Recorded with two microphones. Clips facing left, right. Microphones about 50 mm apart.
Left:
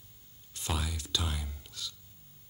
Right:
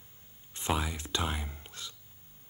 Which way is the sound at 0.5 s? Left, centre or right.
Right.